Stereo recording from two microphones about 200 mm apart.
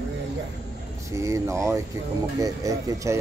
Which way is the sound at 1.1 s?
15° right (ahead or behind).